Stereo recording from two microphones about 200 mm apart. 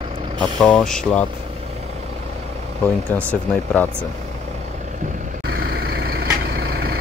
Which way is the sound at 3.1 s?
5° left (ahead or behind).